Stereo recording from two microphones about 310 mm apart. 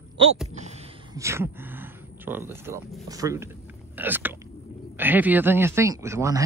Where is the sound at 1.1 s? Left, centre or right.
Centre.